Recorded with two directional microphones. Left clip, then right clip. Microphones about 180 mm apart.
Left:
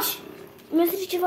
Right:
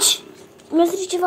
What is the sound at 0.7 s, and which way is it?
Speech, 15° right (ahead or behind).